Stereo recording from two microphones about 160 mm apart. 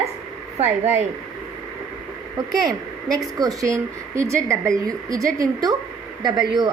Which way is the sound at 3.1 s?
20° right (ahead or behind).